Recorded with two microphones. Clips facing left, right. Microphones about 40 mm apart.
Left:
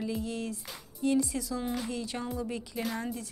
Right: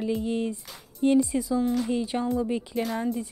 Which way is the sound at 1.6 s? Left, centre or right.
Centre.